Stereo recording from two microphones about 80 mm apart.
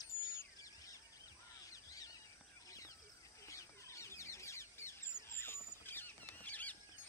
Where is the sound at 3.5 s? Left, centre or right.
Left.